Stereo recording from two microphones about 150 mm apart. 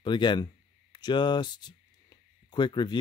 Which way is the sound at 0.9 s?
30° left (ahead or behind).